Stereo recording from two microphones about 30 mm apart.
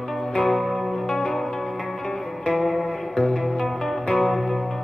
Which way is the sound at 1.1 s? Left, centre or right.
Centre.